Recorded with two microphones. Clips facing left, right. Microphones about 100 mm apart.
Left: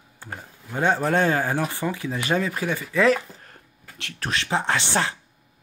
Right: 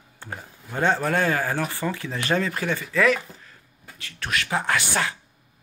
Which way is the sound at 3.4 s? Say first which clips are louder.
Left 1 dB; 65° left (ahead or behind).